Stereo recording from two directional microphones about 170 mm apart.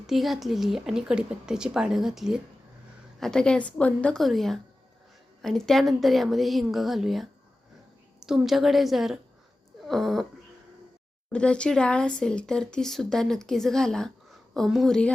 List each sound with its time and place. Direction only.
0.1 s speech: centre (ahead or behind)
8.3 s speech: centre (ahead or behind)
9.8 s dog: centre (ahead or behind)
11.3 s speech: 5° left (ahead or behind)